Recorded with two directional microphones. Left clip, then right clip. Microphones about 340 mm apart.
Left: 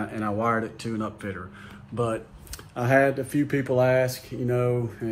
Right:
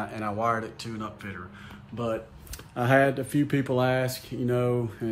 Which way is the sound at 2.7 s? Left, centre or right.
Centre.